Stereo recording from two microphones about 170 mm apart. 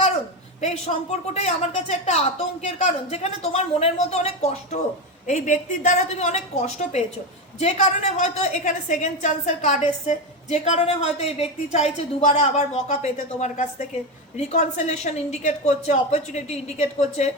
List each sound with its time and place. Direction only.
0.9 s a woman's voice: 50° left (ahead or behind)